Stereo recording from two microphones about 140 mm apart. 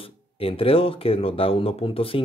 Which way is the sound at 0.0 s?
40° left (ahead or behind).